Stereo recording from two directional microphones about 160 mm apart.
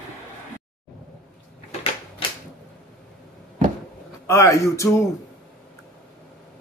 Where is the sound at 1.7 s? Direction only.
40° left (ahead or behind).